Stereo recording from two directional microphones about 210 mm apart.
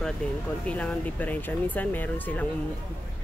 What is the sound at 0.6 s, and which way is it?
Speech, 5° left (ahead or behind).